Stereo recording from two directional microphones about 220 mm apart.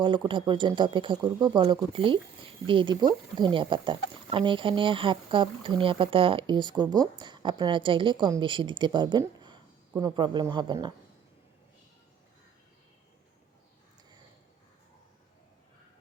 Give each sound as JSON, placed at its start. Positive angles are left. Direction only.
{"t": 0.0, "sound": "speech", "side_deg": -20}